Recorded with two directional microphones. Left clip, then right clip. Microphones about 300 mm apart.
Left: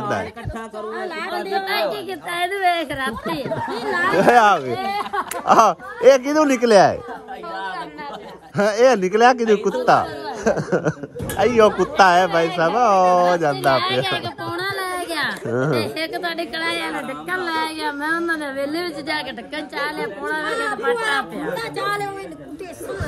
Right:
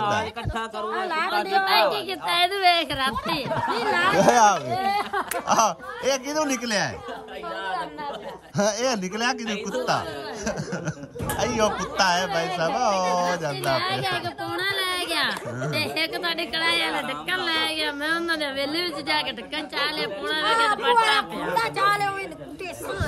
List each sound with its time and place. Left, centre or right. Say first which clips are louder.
0.9 s speech: right 3 dB; right
1.3 s a woman's voice: right 2 dB; centre
8.5 s a woman's voice: left 9 dB; centre
14.4 s a woman's voice: left 1 dB; centre
21.5 s speech: right 3 dB; centre